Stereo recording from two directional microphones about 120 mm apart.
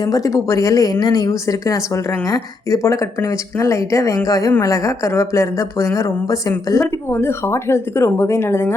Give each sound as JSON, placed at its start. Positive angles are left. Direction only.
{"t": 0.0, "sound": "a woman's voice", "side_deg": 30}